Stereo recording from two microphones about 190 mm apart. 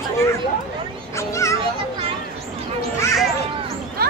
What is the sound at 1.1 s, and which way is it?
Children playing, 15° left (ahead or behind).